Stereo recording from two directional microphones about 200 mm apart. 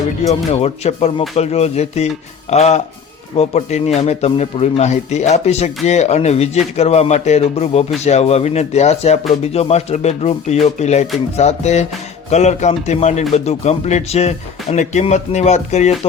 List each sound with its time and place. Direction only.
0.2 s speech: 30° left (ahead or behind)